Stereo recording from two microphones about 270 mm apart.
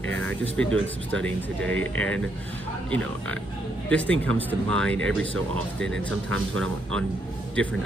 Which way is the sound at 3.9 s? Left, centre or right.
Centre.